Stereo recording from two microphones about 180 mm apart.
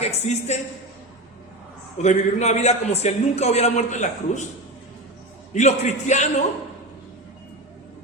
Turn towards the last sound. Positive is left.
turn(degrees=40)  # may be behind; listen again after turning